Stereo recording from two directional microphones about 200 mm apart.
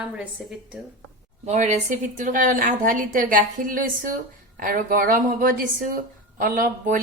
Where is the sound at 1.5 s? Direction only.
35° right (ahead or behind).